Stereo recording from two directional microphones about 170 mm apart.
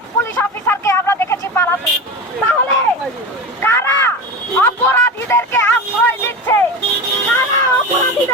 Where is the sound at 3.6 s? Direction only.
15° left (ahead or behind).